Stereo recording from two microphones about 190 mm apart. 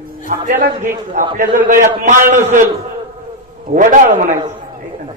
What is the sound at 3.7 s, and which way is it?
Speech, 40° right (ahead or behind).